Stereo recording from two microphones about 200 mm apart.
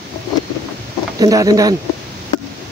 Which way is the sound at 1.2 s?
20° right (ahead or behind).